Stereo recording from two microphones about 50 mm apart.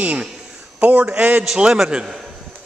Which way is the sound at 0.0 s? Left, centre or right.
Right.